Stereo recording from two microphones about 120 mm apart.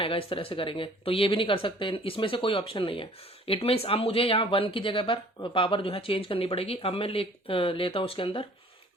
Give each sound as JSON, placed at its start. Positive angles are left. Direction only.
{"t": 0.0, "sound": "speech", "side_deg": 50}